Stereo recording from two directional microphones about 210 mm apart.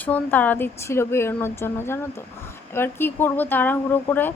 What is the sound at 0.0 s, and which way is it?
Speech, 10° left (ahead or behind).